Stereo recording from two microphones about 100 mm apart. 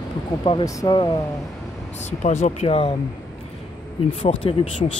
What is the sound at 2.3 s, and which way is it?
Speech, 90° left.